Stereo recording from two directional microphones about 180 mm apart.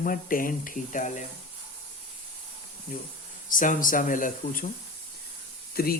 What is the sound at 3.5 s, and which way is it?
Speech, 50° left (ahead or behind).